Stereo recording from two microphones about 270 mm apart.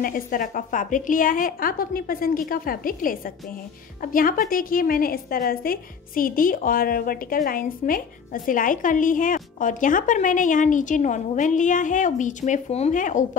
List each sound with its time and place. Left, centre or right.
0.0 s a woman's voice: left